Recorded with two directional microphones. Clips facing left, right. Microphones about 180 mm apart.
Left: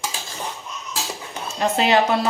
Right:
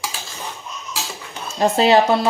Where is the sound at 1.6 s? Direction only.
35° right (ahead or behind).